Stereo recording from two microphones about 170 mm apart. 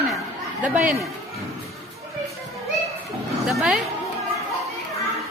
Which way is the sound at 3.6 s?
5° right (ahead or behind).